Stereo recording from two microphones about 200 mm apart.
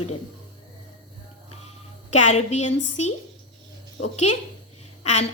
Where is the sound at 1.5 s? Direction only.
35° left (ahead or behind).